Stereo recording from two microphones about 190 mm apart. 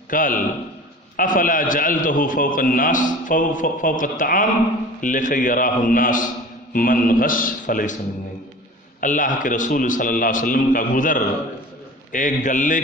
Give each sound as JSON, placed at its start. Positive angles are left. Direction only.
{"t": 0.1, "sound": "a man's voice", "side_deg": 45}
{"t": 9.0, "sound": "a man's voice", "side_deg": 45}